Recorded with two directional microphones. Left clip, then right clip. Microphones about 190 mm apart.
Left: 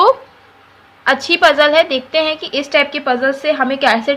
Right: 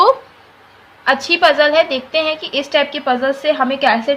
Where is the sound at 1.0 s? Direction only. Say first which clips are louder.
Left 1 dB; 20° left (ahead or behind).